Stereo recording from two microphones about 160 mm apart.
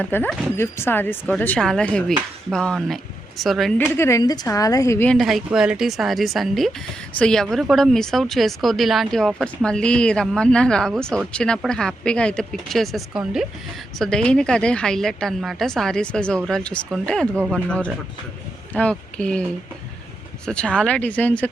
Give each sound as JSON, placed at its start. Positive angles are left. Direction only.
{"t": 0.0, "sound": "speech", "side_deg": 10}
{"t": 3.9, "sound": "a woman's voice", "side_deg": 15}
{"t": 5.1, "sound": "speech", "side_deg": 0}